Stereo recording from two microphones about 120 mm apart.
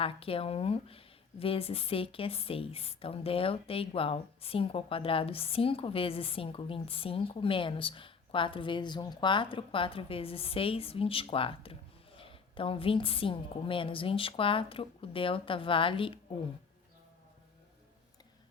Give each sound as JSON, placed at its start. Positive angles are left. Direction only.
{"t": 0.0, "sound": "speech", "side_deg": 50}